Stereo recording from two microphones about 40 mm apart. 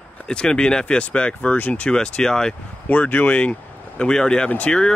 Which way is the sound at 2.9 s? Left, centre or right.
Left.